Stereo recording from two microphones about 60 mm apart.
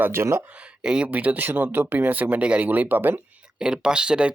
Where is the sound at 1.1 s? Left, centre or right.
Right.